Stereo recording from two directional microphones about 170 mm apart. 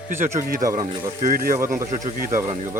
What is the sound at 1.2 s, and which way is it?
Speech, 55° right (ahead or behind).